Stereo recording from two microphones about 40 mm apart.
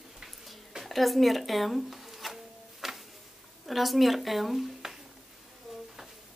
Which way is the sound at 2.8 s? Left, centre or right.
Centre.